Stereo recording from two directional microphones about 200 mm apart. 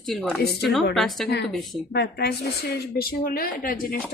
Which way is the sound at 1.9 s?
50° left (ahead or behind).